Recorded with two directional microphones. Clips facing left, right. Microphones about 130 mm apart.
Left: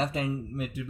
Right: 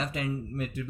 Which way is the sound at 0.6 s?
15° left (ahead or behind).